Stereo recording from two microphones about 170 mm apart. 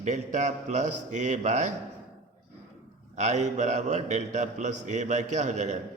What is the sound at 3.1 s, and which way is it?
A man's voice, 45° right (ahead or behind).